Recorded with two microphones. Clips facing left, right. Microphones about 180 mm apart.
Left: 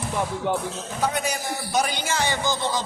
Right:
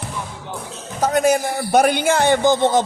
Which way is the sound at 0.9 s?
45° right (ahead or behind).